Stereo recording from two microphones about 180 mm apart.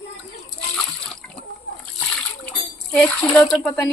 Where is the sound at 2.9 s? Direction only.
10° left (ahead or behind).